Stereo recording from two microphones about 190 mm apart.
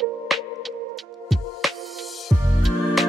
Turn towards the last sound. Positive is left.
turn(degrees=0)  # may be behind; listen again after turning